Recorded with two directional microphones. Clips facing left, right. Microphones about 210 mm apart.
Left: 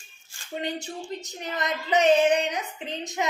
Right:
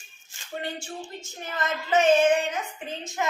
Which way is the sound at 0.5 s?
20° left (ahead or behind).